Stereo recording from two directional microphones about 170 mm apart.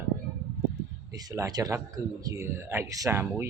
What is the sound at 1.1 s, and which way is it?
A man's voice, 20° right (ahead or behind).